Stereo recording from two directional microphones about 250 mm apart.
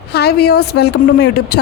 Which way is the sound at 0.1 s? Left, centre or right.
Left.